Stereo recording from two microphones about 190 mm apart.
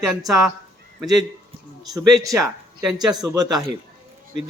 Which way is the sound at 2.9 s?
20° right (ahead or behind).